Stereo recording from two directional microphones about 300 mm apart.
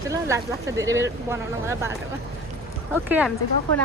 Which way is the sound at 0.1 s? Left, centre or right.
Centre.